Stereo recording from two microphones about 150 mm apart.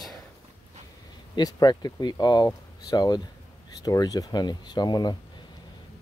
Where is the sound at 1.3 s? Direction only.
25° left (ahead or behind).